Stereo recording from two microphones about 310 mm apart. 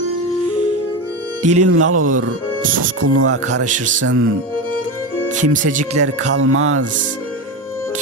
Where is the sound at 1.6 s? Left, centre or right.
Right.